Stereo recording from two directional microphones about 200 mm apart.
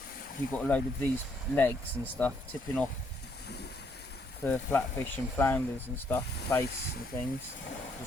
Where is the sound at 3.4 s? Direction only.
55° left (ahead or behind).